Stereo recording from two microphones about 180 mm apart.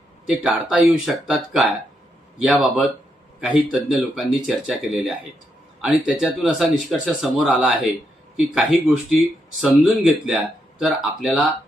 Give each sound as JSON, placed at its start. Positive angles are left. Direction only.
{"t": 0.3, "sound": "speech", "side_deg": -5}